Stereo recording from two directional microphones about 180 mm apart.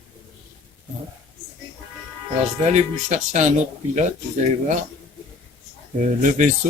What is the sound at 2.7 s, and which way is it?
Speech, 40° right (ahead or behind).